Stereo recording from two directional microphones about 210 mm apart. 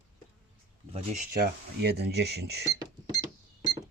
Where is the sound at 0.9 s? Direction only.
30° right (ahead or behind).